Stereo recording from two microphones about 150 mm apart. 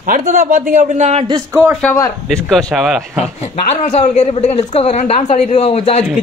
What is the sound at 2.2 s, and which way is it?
A man's voice, centre (ahead or behind).